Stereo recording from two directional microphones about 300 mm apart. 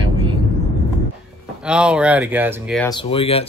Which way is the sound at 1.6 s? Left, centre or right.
Centre.